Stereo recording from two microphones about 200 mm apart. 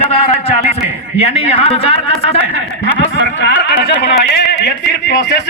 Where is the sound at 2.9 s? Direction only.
65° left (ahead or behind).